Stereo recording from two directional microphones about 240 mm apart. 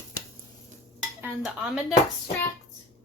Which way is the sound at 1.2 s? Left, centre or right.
Centre.